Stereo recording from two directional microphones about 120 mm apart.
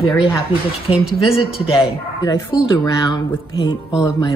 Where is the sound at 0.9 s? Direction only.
5° right (ahead or behind).